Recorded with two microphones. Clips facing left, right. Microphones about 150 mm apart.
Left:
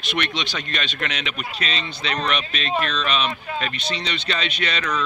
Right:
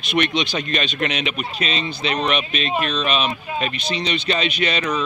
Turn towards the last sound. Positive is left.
turn(degrees=-15)  # may be behind; listen again after turning